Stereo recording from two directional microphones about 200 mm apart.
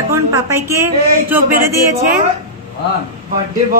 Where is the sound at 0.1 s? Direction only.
15° right (ahead or behind).